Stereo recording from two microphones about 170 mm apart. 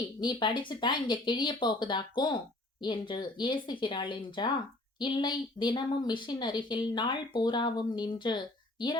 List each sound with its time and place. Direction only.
0.2 s speech: 25° left (ahead or behind)